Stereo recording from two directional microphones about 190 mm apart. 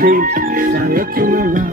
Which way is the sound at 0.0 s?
45° right (ahead or behind).